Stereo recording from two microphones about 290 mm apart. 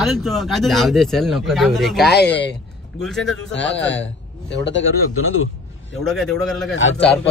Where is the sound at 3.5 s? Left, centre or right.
Left.